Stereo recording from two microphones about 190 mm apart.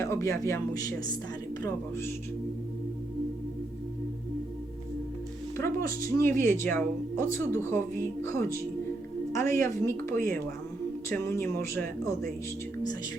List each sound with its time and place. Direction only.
0.0 s speech: 15° left (ahead or behind)
5.5 s speech: 15° left (ahead or behind)